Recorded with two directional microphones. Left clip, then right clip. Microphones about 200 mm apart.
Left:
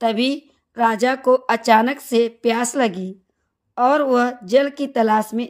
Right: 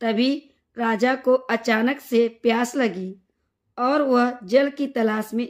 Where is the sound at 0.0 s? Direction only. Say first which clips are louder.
Left 3 dB; 35° left (ahead or behind).